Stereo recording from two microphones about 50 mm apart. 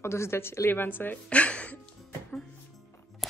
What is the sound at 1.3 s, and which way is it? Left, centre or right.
Speech, left.